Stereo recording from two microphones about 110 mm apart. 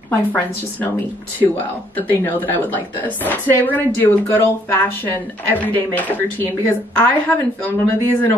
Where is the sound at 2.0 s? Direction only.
15° left (ahead or behind).